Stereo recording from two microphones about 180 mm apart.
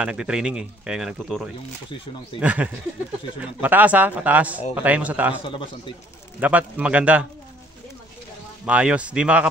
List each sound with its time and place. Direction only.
0.0 s speech: 5° right (ahead or behind)
5.4 s a man's voice: 30° left (ahead or behind)
6.4 s speech: 5° right (ahead or behind)
8.6 s speech: 5° right (ahead or behind)